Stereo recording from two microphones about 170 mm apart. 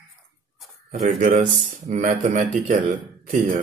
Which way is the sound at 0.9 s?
50° right (ahead or behind).